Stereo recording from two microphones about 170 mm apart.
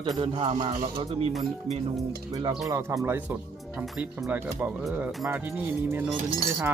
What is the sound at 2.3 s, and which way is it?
Speech, 25° right (ahead or behind).